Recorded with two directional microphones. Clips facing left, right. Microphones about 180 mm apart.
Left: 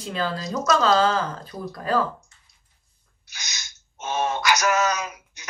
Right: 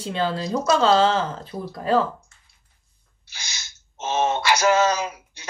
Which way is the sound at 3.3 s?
30° right (ahead or behind).